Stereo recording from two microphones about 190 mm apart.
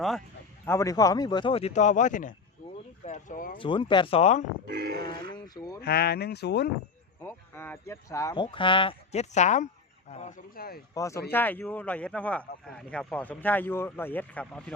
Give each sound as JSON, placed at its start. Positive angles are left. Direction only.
{"t": 0.6, "sound": "speech", "side_deg": 15}
{"t": 3.6, "sound": "speech", "side_deg": 25}
{"t": 4.6, "sound": "speech", "side_deg": -55}
{"t": 5.1, "sound": "speech", "side_deg": 25}
{"t": 5.8, "sound": "speech", "side_deg": 55}
{"t": 7.2, "sound": "speech", "side_deg": 10}
{"t": 10.9, "sound": "speech", "side_deg": 15}